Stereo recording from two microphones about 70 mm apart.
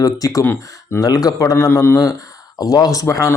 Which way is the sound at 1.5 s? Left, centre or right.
Left.